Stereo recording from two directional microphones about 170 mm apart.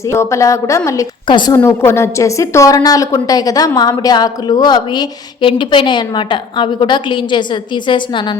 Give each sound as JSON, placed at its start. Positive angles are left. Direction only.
{"t": 0.1, "sound": "a woman's voice", "side_deg": 15}
{"t": 1.5, "sound": "a woman's voice", "side_deg": 15}